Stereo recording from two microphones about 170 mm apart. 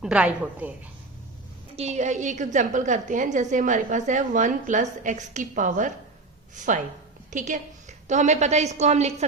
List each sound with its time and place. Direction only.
0.0 s a woman's voice: 5° right (ahead or behind)
1.7 s a woman's voice: 40° right (ahead or behind)
7.3 s a woman's voice: 45° right (ahead or behind)